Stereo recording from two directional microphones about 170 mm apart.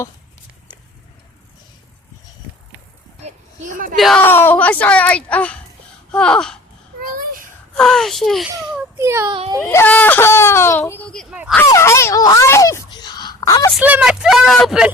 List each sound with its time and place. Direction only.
3.2 s a sound: 45° right (ahead or behind)
3.9 s a child's voice: centre (ahead or behind)
4.2 s a child's voice: 10° left (ahead or behind)
7.0 s a sound: 60° right (ahead or behind)
7.8 s a child's voice: centre (ahead or behind)
9.0 s a child's voice: 15° right (ahead or behind)
9.3 s speech: 30° right (ahead or behind)
9.6 s speech: 10° left (ahead or behind)
11.3 s a child's voice: 5° right (ahead or behind)
11.7 s speech: 15° left (ahead or behind)
13.7 s speech: 5° right (ahead or behind)